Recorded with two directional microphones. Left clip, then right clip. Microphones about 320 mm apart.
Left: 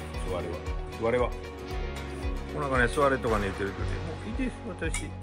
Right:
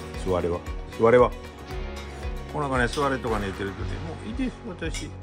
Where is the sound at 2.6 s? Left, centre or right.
Centre.